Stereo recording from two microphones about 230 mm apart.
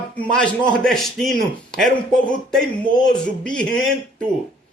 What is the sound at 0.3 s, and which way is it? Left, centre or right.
A man's voice, centre.